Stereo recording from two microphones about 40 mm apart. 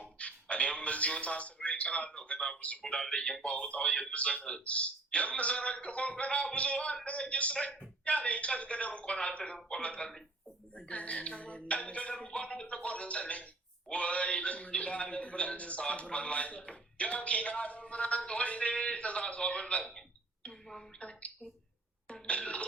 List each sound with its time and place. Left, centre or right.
0.0 s a sound: left
2.8 s speech: centre
3.4 s a man's voice: left
3.8 s speech: centre
4.1 s a man's voice: left
12.2 s a sound: left
12.6 s music: left
13.9 s a sound: left
15.8 s a man's voice: left
21.0 s speech: left
22.1 s throat clearing: left